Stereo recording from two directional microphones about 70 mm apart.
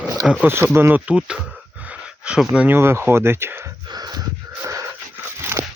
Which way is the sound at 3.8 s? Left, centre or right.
Right.